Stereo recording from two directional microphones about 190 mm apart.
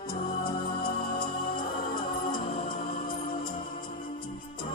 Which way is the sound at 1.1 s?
25° left (ahead or behind).